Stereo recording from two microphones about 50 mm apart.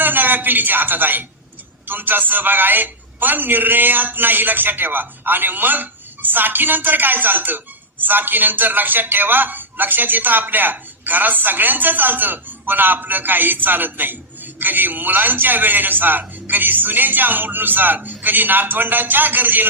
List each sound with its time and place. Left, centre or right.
0.0 s a man's voice: right